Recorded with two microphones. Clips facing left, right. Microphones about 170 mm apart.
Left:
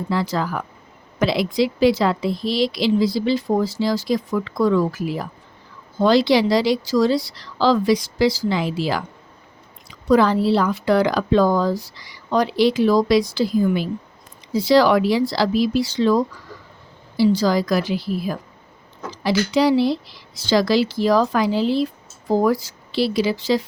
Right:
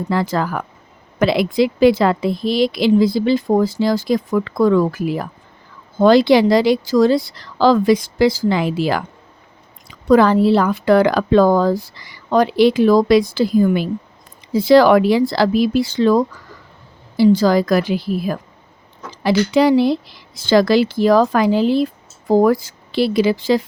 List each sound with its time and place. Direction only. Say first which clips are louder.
0.1 s speech: right 3 dB; 55° right (ahead or behind)